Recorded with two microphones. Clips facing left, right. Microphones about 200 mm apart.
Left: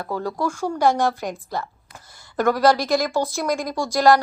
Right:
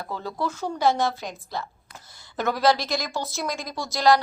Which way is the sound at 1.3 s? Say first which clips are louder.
Left 5 dB; 45° left (ahead or behind).